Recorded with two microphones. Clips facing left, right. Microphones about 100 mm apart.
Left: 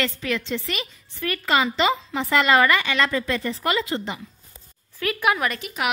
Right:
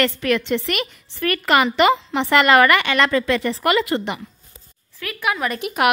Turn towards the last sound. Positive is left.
turn(degrees=-60)  # may be behind; listen again after turning